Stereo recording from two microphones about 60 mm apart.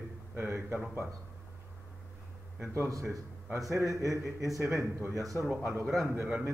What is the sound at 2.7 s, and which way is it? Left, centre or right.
Speech, right.